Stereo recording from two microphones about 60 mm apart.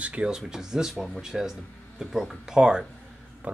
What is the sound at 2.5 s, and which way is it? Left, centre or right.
Speech, centre.